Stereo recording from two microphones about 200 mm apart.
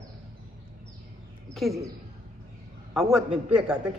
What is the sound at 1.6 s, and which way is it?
Speech, centre (ahead or behind).